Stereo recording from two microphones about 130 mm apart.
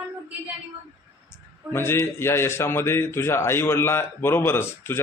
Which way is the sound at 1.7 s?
20° left (ahead or behind).